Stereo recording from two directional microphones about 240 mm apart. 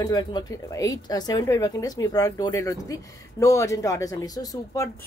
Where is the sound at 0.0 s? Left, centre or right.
Centre.